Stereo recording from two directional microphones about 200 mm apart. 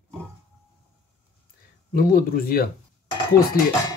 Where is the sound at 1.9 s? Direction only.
45° left (ahead or behind).